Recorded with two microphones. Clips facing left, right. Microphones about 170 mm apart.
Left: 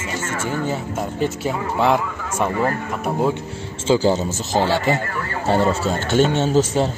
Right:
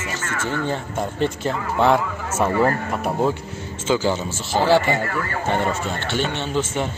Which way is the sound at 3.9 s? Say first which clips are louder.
Left 4 dB; 35° left (ahead or behind).